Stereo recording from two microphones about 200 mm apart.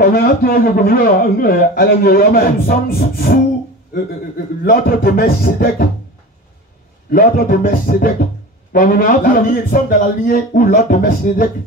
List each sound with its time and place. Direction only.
0.0 s a man's voice: 45° left (ahead or behind)
4.6 s a man's voice: 50° left (ahead or behind)
7.1 s a man's voice: 45° left (ahead or behind)